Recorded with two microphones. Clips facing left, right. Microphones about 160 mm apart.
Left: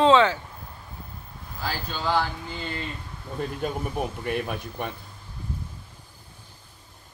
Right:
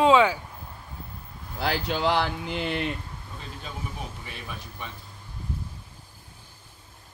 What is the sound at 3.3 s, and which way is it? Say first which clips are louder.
Speech: left 12 dB; 55° left (ahead or behind).